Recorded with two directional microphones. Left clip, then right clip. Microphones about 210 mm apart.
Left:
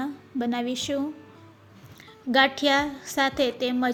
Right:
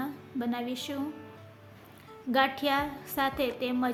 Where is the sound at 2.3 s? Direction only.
25° left (ahead or behind).